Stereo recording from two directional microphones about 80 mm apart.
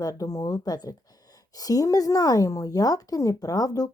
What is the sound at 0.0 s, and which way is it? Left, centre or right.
Speech, left.